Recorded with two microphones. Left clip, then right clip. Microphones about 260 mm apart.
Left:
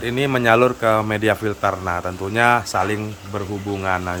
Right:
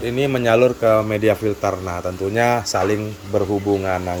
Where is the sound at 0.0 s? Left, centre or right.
Centre.